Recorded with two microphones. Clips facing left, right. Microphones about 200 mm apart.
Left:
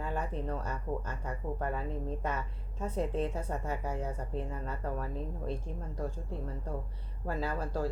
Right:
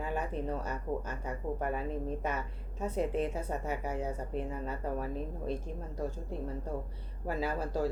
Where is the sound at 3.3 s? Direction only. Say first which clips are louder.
Right 1 dB; 5° right (ahead or behind).